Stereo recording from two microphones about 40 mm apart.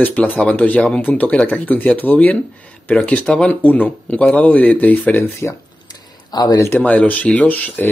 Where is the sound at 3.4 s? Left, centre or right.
Left.